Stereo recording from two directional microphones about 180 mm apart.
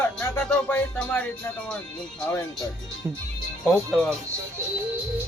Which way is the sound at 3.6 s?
5° left (ahead or behind).